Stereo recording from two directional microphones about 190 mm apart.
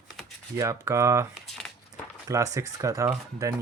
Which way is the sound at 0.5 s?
15° right (ahead or behind).